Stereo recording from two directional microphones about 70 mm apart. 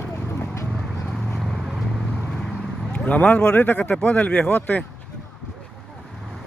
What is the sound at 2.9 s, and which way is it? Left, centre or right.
Speech, centre.